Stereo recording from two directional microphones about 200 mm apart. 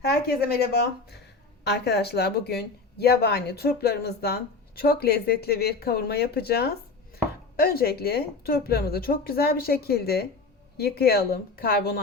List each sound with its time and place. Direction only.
0.0 s a woman's voice: 55° left (ahead or behind)